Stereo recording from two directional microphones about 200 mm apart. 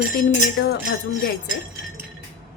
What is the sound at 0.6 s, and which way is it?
Speech, 55° left (ahead or behind).